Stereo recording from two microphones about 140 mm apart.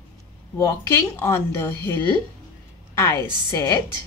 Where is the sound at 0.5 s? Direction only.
20° left (ahead or behind).